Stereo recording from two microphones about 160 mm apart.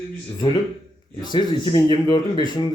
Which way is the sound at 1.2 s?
30° left (ahead or behind).